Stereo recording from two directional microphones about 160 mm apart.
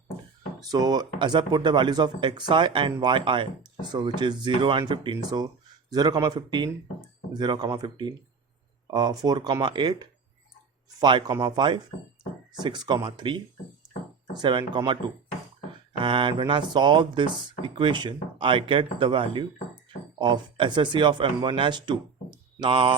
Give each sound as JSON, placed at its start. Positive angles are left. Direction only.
{"t": 0.7, "sound": "speech", "side_deg": -25}